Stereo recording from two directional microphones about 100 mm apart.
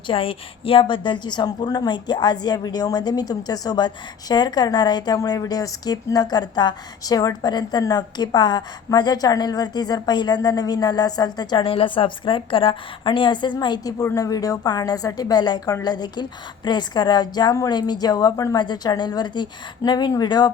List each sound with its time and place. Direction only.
0.1 s a woman's voice: 65° left (ahead or behind); by 11.6 s 45° left (ahead or behind)
11.6 s a woman's voice: 65° left (ahead or behind); by 13.9 s 50° left (ahead or behind)
14.2 s a woman's voice: 35° left (ahead or behind)